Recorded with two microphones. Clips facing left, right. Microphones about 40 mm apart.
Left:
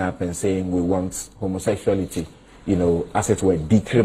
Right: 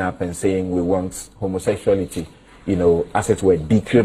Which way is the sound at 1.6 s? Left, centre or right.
Centre.